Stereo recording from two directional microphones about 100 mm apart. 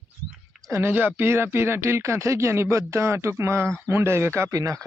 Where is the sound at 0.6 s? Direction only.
25° right (ahead or behind).